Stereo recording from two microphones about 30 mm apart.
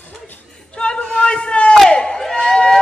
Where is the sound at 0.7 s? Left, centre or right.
Left.